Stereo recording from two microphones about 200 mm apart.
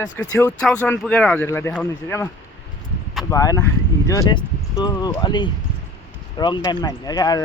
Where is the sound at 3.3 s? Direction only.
15° left (ahead or behind).